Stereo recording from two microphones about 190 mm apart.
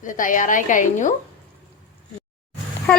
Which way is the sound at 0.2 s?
45° left (ahead or behind).